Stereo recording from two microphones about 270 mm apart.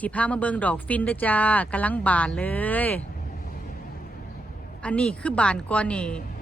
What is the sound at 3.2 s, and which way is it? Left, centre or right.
Vehicle, left.